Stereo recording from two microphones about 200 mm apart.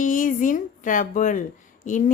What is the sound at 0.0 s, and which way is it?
A woman's voice, 40° left (ahead or behind).